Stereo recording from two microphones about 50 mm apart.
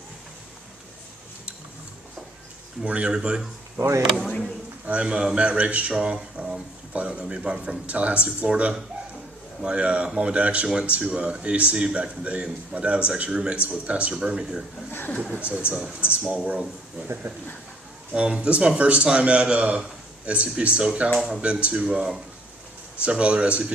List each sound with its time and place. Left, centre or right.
2.8 s a man's voice: right
3.8 s speech: right
4.2 s speech: centre
4.9 s a man's voice: right
16.2 s speech: centre
16.5 s a man's voice: right
18.1 s a man's voice: right